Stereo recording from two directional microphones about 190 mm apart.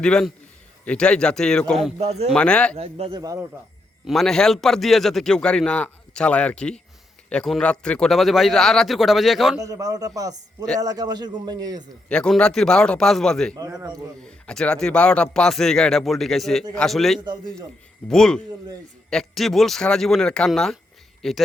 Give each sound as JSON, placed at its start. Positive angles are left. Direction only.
{"t": 0.0, "sound": "speech", "side_deg": 5}
{"t": 2.0, "sound": "speech", "side_deg": -35}
{"t": 2.3, "sound": "speech", "side_deg": 5}
{"t": 2.7, "sound": "a man's voice", "side_deg": -30}
{"t": 4.0, "sound": "speech", "side_deg": 0}
{"t": 9.6, "sound": "a man's voice", "side_deg": -20}
{"t": 12.0, "sound": "speech", "side_deg": 5}
{"t": 13.6, "sound": "a man's voice", "side_deg": -20}
{"t": 14.2, "sound": "speech", "side_deg": 5}